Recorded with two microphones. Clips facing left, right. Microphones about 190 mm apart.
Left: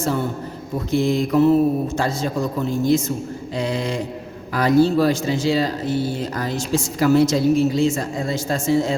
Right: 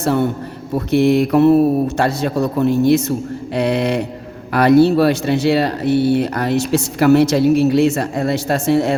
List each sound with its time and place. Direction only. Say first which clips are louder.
0.0 s speech: right 6 dB; 65° right (ahead or behind)